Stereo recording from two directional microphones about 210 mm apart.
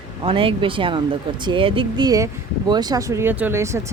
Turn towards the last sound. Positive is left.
turn(degrees=-15)  # may be behind; listen again after turning